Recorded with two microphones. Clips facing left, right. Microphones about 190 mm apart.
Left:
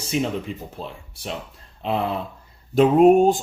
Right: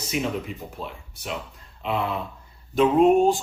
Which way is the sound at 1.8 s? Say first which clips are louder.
Left 2 dB; 35° left (ahead or behind).